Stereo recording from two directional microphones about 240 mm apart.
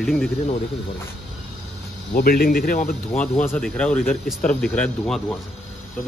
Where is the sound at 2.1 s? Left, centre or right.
Left.